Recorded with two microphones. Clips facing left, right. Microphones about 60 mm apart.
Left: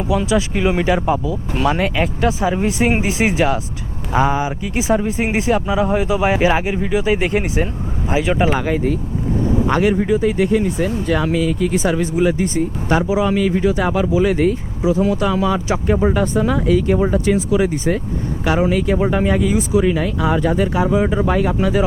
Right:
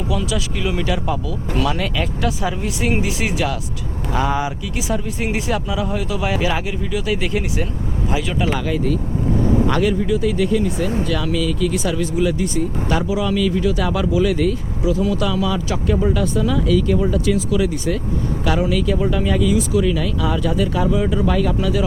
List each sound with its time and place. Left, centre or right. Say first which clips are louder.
0.0 s speech: left 5 dB; left